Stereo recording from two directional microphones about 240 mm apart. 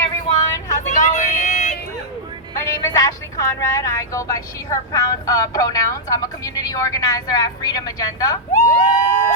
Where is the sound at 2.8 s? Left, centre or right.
Centre.